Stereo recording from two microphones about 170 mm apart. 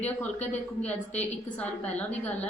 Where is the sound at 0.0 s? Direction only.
10° left (ahead or behind).